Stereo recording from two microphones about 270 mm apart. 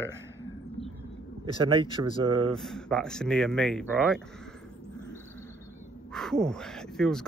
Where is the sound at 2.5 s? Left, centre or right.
Centre.